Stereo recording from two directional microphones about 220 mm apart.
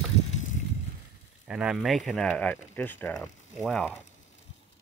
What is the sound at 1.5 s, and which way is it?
Speech, 5° right (ahead or behind).